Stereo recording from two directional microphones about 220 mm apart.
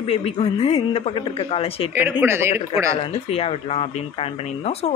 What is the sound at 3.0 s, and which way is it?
Speech, 30° left (ahead or behind).